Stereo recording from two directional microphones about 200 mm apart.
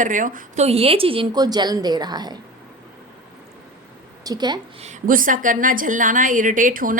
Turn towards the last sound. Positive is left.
turn(degrees=-45)  # may be behind; listen again after turning